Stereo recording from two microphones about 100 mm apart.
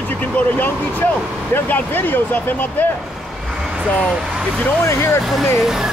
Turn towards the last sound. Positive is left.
turn(degrees=-5)  # may be behind; listen again after turning